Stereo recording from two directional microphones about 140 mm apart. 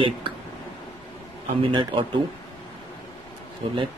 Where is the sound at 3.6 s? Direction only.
40° right (ahead or behind).